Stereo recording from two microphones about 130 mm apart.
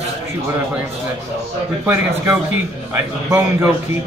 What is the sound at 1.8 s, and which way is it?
Speech, 15° right (ahead or behind).